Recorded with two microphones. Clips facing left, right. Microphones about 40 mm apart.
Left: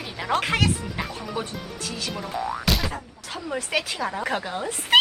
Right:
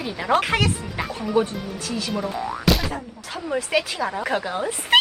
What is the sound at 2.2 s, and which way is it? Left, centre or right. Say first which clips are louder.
Speech: right 2 dB; right.